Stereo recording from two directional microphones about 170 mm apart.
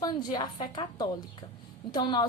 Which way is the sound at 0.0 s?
25° left (ahead or behind).